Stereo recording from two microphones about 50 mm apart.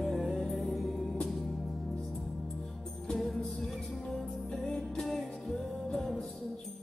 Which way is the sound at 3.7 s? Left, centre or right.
Centre.